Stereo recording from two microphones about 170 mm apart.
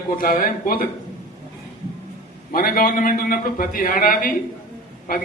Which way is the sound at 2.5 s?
60° left (ahead or behind).